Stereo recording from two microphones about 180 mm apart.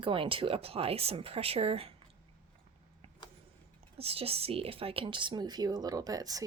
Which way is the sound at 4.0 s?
35° right (ahead or behind).